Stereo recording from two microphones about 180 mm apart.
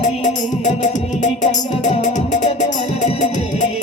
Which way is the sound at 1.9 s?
45° left (ahead or behind).